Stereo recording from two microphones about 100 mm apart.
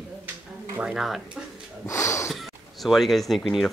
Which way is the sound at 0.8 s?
5° right (ahead or behind).